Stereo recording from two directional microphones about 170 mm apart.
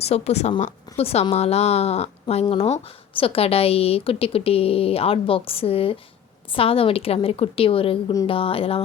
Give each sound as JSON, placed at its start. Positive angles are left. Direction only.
{"t": 0.0, "sound": "a woman's voice", "side_deg": 40}